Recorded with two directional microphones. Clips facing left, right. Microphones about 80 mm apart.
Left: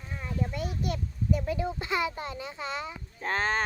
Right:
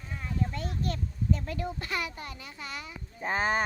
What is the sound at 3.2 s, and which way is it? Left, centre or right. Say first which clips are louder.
Speech: right 1 dB; centre.